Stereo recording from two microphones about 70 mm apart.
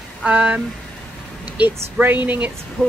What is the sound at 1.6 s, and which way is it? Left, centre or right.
Speech, right.